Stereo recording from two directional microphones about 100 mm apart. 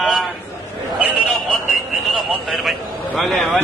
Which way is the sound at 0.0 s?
Centre (ahead or behind).